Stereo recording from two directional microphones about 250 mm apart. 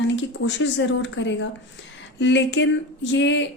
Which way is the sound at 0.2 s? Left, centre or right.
Left.